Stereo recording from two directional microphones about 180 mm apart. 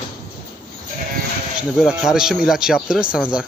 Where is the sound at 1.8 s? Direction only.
5° right (ahead or behind).